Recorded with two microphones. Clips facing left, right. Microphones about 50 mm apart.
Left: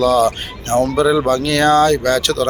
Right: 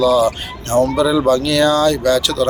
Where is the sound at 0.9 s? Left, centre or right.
Left.